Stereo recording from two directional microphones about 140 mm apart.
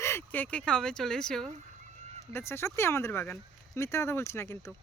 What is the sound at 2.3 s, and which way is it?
Speech, 20° left (ahead or behind).